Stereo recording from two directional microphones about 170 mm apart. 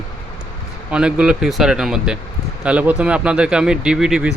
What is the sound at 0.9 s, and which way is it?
Speech, 5° right (ahead or behind).